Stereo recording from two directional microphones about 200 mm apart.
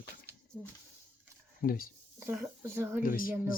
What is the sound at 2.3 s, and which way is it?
Speech, 10° right (ahead or behind).